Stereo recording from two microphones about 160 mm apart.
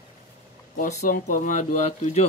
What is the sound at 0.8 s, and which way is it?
Speech, 50° left (ahead or behind).